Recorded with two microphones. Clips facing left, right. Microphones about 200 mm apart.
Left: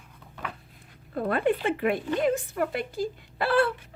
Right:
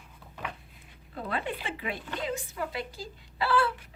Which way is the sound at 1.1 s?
50° left (ahead or behind).